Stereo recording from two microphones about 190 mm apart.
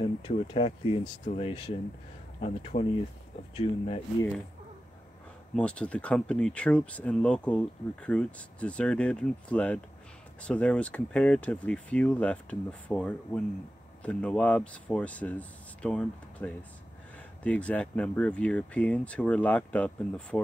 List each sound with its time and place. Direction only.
0.0 s speech: 25° left (ahead or behind)
5.6 s speech: 5° left (ahead or behind)